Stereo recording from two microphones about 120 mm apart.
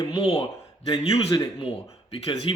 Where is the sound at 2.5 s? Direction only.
45° left (ahead or behind).